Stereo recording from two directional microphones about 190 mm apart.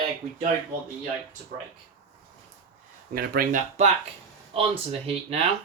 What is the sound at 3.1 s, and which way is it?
Speech, 50° right (ahead or behind).